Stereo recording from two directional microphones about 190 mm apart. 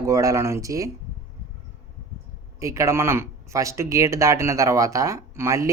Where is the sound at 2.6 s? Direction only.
15° right (ahead or behind).